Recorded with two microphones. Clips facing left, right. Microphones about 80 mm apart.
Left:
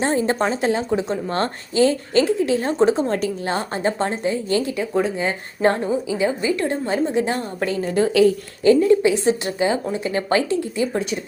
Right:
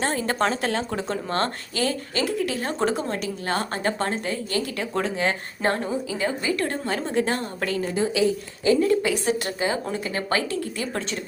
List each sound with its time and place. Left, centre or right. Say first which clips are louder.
0.0 s a woman's voice: left 4 dB; left
1.3 s a woman's voice: left 3 dB; left
4.8 s a woman's voice: left 4 dB; centre
7.9 s a woman's voice: left 8 dB; left
8.8 s a woman's voice: left 6 dB; left